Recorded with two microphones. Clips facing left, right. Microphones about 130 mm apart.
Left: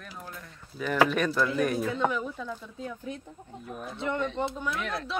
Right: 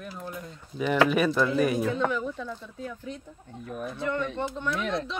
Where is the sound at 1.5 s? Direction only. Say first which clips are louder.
Right 3 dB; 5° right (ahead or behind).